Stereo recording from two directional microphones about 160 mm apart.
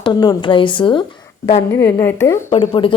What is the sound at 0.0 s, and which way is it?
A woman's voice, 30° left (ahead or behind).